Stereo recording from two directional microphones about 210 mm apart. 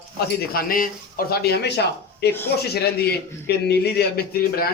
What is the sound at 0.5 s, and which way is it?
A man's voice, 40° left (ahead or behind).